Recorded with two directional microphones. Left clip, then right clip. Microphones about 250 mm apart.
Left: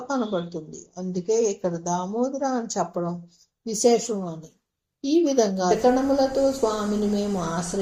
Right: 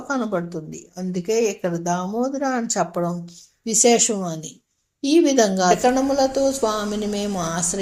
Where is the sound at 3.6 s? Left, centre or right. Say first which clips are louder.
Right 3 dB; right.